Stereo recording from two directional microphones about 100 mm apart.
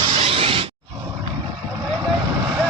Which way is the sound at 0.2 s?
70° right (ahead or behind).